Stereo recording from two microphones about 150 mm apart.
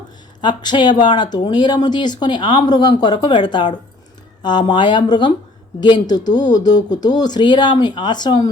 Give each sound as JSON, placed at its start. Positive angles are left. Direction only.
{"t": 0.4, "sound": "speech", "side_deg": 30}
{"t": 4.7, "sound": "speech", "side_deg": 30}